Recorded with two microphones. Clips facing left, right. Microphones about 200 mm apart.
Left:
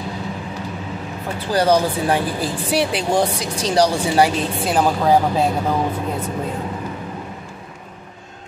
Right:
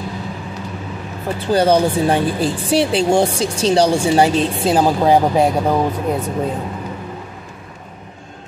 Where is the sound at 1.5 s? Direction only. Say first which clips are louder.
Right 3 dB; 25° right (ahead or behind).